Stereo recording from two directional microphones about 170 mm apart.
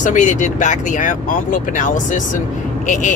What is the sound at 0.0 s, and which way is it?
Speech, 50° left (ahead or behind).